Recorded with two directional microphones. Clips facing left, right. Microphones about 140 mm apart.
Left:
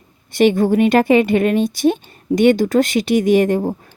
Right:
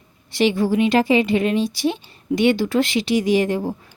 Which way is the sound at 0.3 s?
50° left (ahead or behind).